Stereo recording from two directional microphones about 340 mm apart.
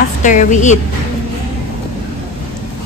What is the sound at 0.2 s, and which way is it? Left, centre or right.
Speech, left.